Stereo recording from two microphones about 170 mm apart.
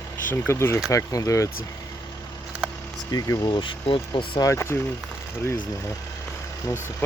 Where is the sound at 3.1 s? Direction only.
25° left (ahead or behind).